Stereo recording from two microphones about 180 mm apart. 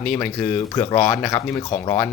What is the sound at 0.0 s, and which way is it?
Speech, 5° left (ahead or behind).